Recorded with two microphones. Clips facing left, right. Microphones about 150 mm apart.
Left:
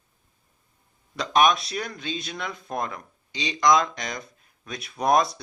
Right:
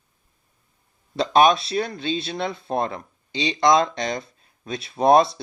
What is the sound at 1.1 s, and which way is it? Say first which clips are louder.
Speech: right 4 dB; 30° right (ahead or behind).